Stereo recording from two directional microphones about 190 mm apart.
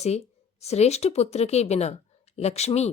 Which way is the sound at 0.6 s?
35° left (ahead or behind).